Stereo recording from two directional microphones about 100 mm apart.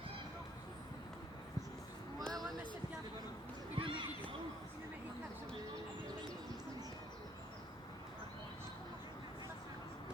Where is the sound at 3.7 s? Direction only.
60° right (ahead or behind).